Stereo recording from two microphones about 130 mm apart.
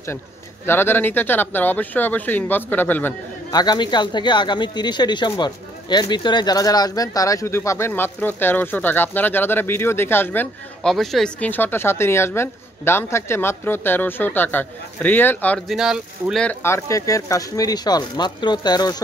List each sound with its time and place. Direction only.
0.7 s speech: 15° left (ahead or behind)
3.5 s speech: 35° left (ahead or behind); by 10.5 s 15° left (ahead or behind)
10.8 s speech: 5° left (ahead or behind)
15.7 s speech: 5° right (ahead or behind)
16.4 s speech: 20° left (ahead or behind)